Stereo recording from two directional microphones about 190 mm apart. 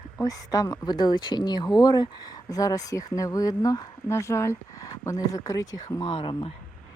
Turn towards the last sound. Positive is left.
turn(degrees=30)  # may be behind; listen again after turning